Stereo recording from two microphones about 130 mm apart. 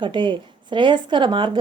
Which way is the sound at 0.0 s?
40° right (ahead or behind).